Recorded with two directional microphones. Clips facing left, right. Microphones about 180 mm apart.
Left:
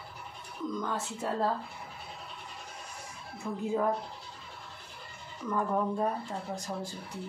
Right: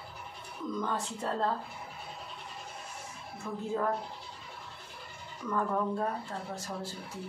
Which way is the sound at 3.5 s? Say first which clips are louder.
Left 2 dB; 15° left (ahead or behind).